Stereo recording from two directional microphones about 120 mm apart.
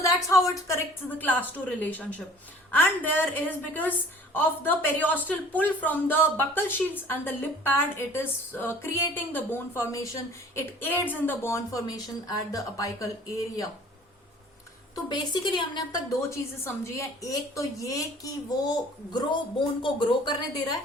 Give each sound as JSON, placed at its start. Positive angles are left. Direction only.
{"t": 0.3, "sound": "a woman's voice", "side_deg": 25}
{"t": 1.2, "sound": "a woman's voice", "side_deg": 15}
{"t": 15.1, "sound": "a woman's voice", "side_deg": 40}
{"t": 19.1, "sound": "a woman's voice", "side_deg": 40}